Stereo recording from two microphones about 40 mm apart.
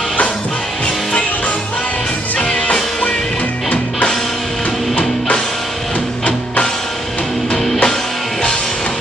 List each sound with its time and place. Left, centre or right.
2.4 s music: left
7.5 s music: centre